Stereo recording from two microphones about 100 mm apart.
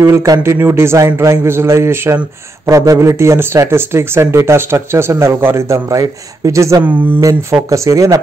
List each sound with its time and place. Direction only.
0.0 s speech: 30° right (ahead or behind)
6.8 s a sound: 15° right (ahead or behind)
7.7 s speech: 30° right (ahead or behind)